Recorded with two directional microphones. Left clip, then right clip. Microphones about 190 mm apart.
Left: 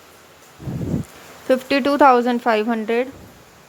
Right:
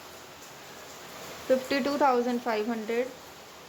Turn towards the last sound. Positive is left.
turn(degrees=20)  # may be behind; listen again after turning